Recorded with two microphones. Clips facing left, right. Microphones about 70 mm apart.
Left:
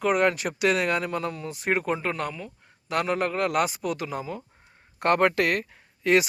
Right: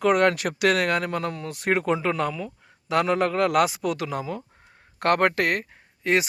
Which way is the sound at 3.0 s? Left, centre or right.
Right.